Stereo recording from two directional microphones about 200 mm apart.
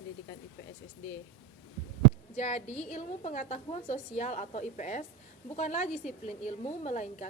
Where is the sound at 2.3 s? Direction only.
35° left (ahead or behind).